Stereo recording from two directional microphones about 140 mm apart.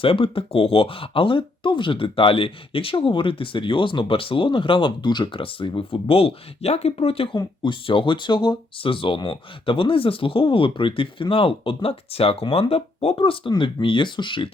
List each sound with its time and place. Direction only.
0.0 s speech: 40° left (ahead or behind)